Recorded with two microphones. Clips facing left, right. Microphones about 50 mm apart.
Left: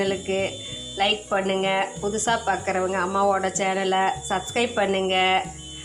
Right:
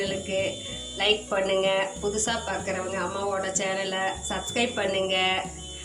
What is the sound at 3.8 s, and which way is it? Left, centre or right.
Speech, left.